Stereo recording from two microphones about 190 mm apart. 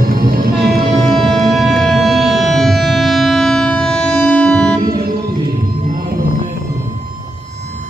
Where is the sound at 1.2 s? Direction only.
Centre (ahead or behind).